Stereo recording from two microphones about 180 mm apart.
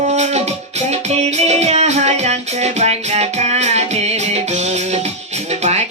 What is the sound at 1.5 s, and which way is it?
Music, 35° right (ahead or behind).